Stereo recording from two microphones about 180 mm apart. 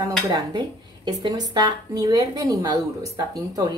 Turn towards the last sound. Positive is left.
turn(degrees=-20)  # may be behind; listen again after turning